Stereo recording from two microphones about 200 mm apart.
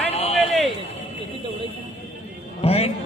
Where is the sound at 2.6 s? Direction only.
30° left (ahead or behind).